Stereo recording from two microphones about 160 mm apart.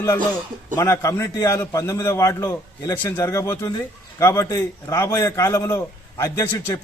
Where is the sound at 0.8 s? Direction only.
20° left (ahead or behind).